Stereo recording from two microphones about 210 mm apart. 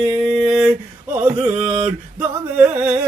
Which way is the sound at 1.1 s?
10° right (ahead or behind).